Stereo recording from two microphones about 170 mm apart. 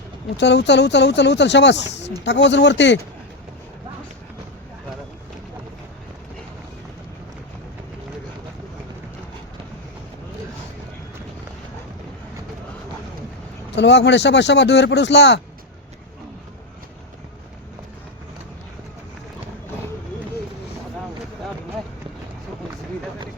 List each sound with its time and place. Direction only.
0.3 s speech: 90° left
13.7 s speech: 90° left